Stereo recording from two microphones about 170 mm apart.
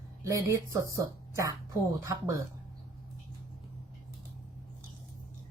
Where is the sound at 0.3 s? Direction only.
20° right (ahead or behind).